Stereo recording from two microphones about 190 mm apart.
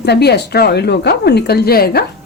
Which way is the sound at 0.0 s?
60° left (ahead or behind).